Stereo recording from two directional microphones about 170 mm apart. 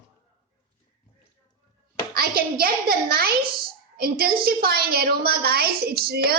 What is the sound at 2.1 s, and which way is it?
A child's voice, 65° right (ahead or behind).